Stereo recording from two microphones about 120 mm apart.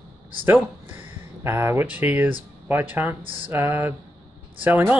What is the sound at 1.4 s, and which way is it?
Speech, 20° right (ahead or behind).